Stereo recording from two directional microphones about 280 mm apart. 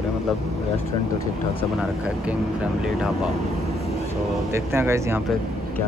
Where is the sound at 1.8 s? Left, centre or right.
Centre.